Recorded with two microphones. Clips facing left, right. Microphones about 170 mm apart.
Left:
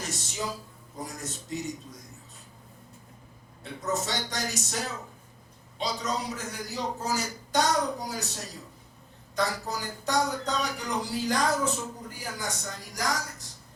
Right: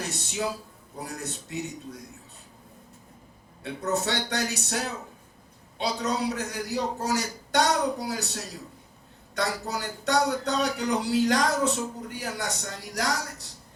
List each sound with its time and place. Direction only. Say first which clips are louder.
0.0 s a sound: right 3 dB; 65° right (ahead or behind)
0.9 s a man's voice: right 2 dB; 65° right (ahead or behind)
3.6 s a man's voice: right 3 dB; 65° right (ahead or behind)
5.8 s speech: right 4 dB; 65° right (ahead or behind)
9.3 s speech: right 1 dB; 70° right (ahead or behind)